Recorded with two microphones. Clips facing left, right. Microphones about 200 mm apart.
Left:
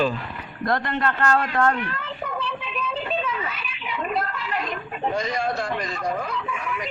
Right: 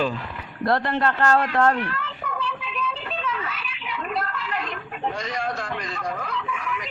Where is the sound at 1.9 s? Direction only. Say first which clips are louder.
Left 1 dB; 25° left (ahead or behind).